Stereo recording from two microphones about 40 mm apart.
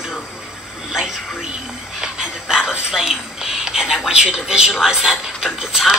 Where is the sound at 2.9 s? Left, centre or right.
Centre.